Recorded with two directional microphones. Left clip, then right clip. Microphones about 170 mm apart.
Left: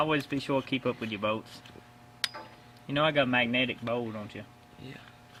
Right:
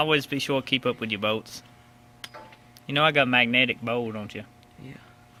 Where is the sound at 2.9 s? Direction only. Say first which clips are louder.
Right 5 dB; 30° right (ahead or behind).